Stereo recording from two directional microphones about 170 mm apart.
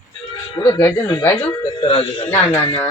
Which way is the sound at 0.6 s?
15° left (ahead or behind).